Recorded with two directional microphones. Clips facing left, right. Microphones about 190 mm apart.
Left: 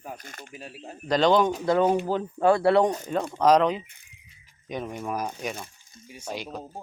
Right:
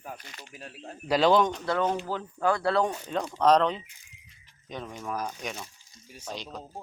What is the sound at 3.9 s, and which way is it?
Speech, 60° left (ahead or behind).